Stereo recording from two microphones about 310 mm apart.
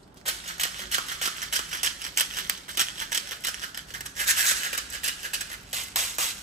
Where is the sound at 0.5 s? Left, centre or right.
Right.